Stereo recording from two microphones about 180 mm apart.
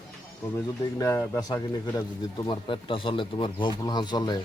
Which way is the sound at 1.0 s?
20° left (ahead or behind).